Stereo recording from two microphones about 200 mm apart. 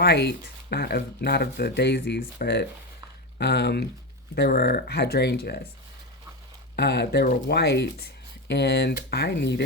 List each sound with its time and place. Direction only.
0.0 s speech: 55° left (ahead or behind)
6.7 s speech: 55° left (ahead or behind)